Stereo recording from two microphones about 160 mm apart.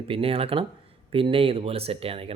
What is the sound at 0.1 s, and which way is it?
Speech, 35° right (ahead or behind).